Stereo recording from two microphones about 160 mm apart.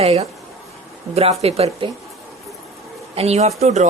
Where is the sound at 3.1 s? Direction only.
40° right (ahead or behind).